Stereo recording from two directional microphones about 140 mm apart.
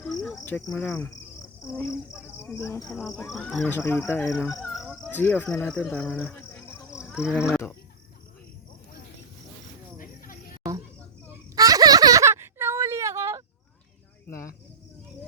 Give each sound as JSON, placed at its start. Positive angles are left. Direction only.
{"t": 0.0, "sound": "cricket", "side_deg": 0}
{"t": 0.9, "sound": "speech", "side_deg": 10}
{"t": 1.4, "sound": "cricket", "side_deg": 20}
{"t": 2.2, "sound": "speech", "side_deg": 15}
{"t": 2.9, "sound": "speech", "side_deg": 0}
{"t": 3.7, "sound": "speech", "side_deg": 15}
{"t": 4.2, "sound": "fowl", "side_deg": 0}
{"t": 5.1, "sound": "speech", "side_deg": 15}
{"t": 6.9, "sound": "a sound", "side_deg": -5}
{"t": 7.4, "sound": "speech", "side_deg": 15}
{"t": 10.0, "sound": "a sound", "side_deg": 85}
{"t": 11.5, "sound": "a sound", "side_deg": -25}
{"t": 14.3, "sound": "cricket", "side_deg": 20}